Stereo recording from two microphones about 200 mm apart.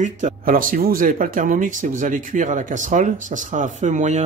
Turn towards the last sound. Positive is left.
turn(degrees=-35)  # may be behind; listen again after turning